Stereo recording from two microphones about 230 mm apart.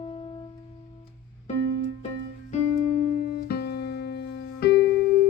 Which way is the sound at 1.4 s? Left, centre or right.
Left.